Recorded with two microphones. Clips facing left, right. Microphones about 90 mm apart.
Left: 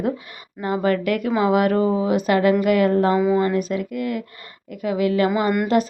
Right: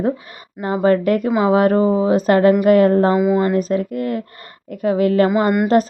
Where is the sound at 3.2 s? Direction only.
20° right (ahead or behind).